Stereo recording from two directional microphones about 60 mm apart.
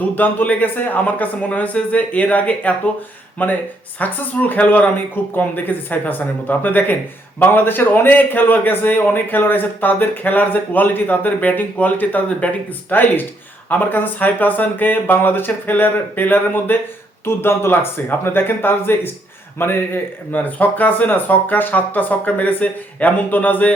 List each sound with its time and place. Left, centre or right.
0.0 s a man's voice: left
17.2 s a man's voice: left